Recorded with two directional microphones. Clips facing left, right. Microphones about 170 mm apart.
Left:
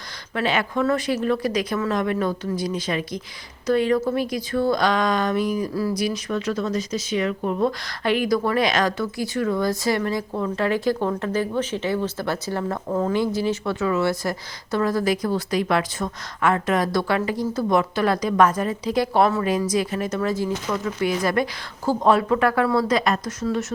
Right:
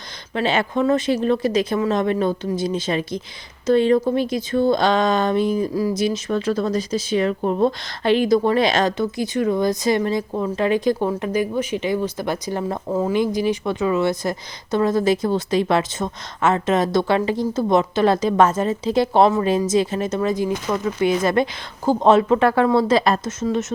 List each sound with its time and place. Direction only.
0.3 s speech: 25° right (ahead or behind)